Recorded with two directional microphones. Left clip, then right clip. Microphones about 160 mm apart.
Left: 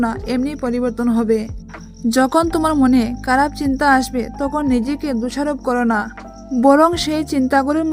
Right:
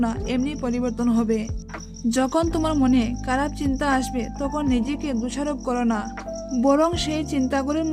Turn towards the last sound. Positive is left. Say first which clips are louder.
# left 7 dB
turn(degrees=35)  # may be behind; listen again after turning